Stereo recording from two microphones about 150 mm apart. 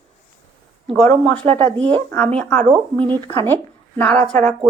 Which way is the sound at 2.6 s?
35° right (ahead or behind).